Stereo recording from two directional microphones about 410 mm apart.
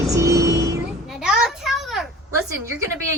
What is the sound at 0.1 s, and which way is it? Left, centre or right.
Music, centre.